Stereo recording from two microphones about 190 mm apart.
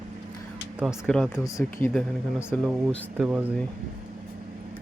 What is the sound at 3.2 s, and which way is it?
Speech, 5° right (ahead or behind).